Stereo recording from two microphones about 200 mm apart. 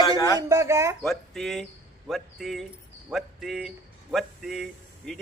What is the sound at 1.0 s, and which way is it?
A man's voice, centre (ahead or behind).